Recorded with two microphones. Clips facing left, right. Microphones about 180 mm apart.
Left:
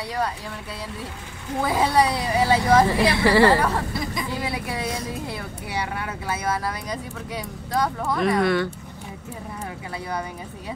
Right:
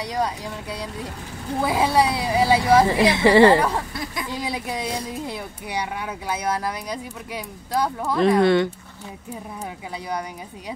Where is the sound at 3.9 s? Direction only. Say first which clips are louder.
Left 2 dB; centre (ahead or behind).